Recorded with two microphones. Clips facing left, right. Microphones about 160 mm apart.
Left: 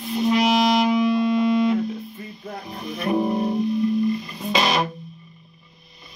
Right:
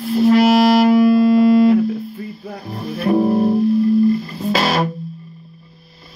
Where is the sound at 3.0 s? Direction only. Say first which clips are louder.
Right 6 dB; 30° right (ahead or behind).